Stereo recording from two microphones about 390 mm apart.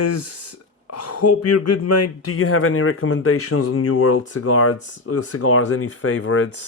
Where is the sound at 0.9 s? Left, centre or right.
Left.